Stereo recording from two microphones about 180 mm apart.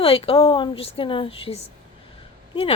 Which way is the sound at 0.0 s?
30° left (ahead or behind).